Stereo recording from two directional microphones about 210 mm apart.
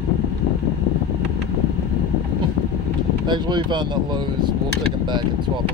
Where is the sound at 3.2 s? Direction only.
20° right (ahead or behind).